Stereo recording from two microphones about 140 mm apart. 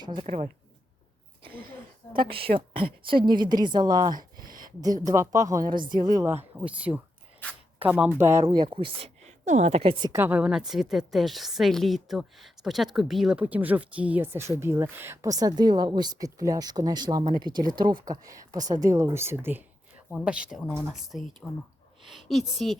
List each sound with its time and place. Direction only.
0.0 s a woman's voice: 35° right (ahead or behind)
0.3 s speech: 50° right (ahead or behind)
2.6 s a woman's voice: 40° right (ahead or behind); by 6.4 s 20° right (ahead or behind)
6.6 s a woman's voice: 10° right (ahead or behind)
8.2 s a woman's voice: 20° right (ahead or behind); by 9.3 s 40° right (ahead or behind)
9.4 s a woman's voice: 60° right (ahead or behind)
10.1 s a woman's voice: 15° right (ahead or behind)